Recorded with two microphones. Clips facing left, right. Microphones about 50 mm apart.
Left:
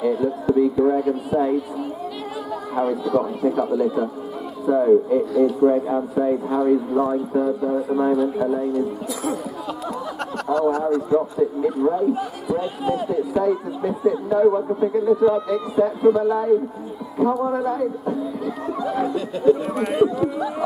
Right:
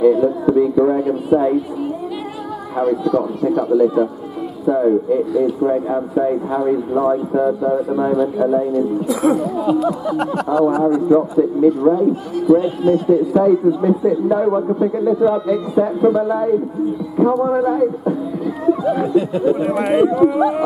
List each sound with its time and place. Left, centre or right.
0.0 s speech: centre
2.8 s speech: centre
9.0 s speech: centre
9.4 s speech: centre
14.8 s speech: centre
17.5 s speech: centre
19.9 s speech: right